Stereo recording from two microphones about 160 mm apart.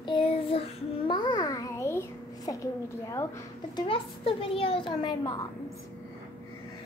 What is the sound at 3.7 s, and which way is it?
A child's voice, 35° left (ahead or behind).